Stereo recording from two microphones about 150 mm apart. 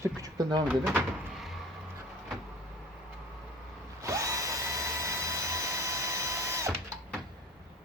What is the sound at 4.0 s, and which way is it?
Drill, 20° right (ahead or behind).